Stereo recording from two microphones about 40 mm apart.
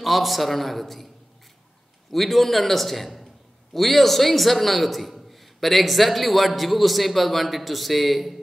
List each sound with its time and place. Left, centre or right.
0.0 s a man's voice: centre
2.0 s a man's voice: centre